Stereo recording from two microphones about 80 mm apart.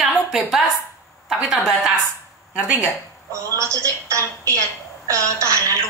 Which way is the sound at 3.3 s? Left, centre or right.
Right.